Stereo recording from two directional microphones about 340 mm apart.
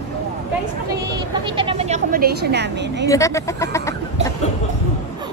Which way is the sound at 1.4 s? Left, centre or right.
Centre.